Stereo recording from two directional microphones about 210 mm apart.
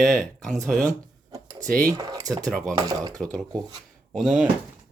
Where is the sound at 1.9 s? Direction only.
15° right (ahead or behind).